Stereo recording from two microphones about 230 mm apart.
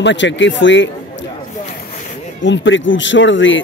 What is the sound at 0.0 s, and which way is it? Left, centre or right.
Speech, left.